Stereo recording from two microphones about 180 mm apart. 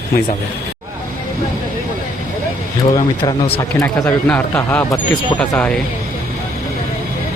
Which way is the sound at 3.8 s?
15° left (ahead or behind).